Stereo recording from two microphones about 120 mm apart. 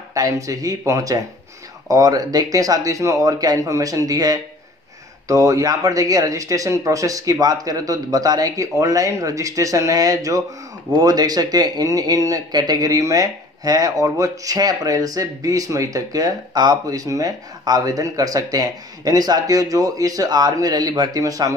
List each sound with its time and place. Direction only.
0.1 s speech: 30° right (ahead or behind)